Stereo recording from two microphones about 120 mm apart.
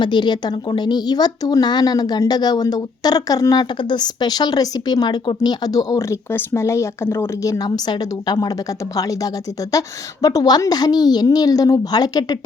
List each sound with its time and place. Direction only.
0.0 s speech: 40° left (ahead or behind)